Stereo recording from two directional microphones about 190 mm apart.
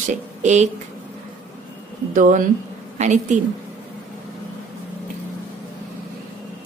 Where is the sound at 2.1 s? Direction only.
45° right (ahead or behind).